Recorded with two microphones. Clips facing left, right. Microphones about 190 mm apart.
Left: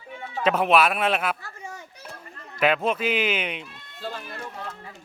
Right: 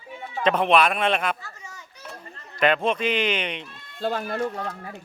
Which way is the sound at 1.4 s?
55° left (ahead or behind).